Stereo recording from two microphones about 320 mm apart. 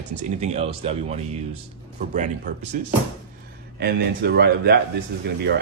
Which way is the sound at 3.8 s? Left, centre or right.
Right.